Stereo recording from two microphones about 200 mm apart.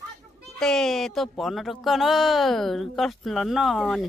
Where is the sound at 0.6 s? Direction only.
Centre (ahead or behind).